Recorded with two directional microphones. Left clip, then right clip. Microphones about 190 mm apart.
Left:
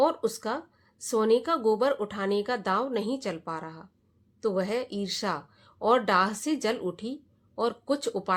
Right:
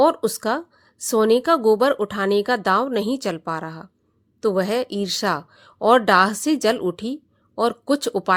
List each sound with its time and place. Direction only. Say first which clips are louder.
0.0 s a woman's voice: right 8 dB; 45° right (ahead or behind)